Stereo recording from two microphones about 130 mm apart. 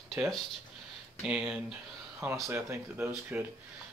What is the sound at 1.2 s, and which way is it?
Speech, 5° right (ahead or behind).